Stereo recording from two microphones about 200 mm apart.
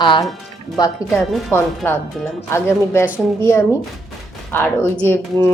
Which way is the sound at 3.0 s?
5° right (ahead or behind).